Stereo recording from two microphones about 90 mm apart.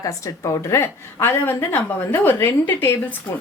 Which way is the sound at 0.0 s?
35° left (ahead or behind).